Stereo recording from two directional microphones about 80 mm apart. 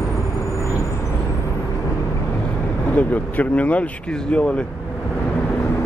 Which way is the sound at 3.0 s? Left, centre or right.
Centre.